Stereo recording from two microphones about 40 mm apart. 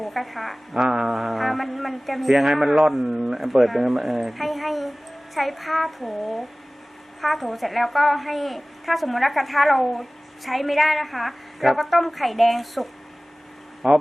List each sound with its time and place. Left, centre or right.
0.0 s a woman's voice: centre
0.9 s music: centre
1.1 s a woman's voice: centre
13.8 s speech: centre